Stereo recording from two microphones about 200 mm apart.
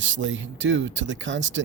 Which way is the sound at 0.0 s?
70° right (ahead or behind).